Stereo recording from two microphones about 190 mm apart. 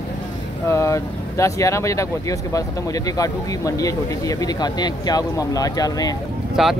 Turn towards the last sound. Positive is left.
turn(degrees=0)  # may be behind; listen again after turning